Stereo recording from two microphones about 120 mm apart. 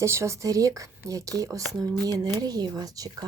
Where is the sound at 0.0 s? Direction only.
25° right (ahead or behind).